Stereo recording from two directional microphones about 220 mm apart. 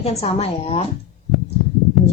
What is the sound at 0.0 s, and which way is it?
Speech, 30° left (ahead or behind).